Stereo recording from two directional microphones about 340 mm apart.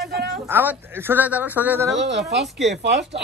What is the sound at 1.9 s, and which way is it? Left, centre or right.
Speech, right.